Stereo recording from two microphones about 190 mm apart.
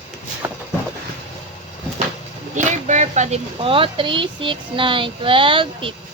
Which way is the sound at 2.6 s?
40° right (ahead or behind).